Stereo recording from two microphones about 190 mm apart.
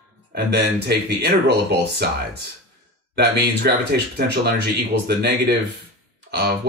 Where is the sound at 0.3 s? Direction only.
60° right (ahead or behind).